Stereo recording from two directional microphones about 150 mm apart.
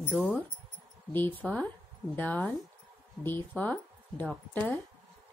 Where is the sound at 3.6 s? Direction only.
10° left (ahead or behind).